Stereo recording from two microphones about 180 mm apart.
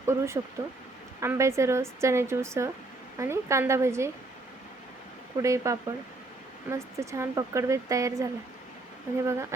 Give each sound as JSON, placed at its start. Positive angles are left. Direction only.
{"t": 0.0, "sound": "speech", "side_deg": -15}
{"t": 5.4, "sound": "speech", "side_deg": -15}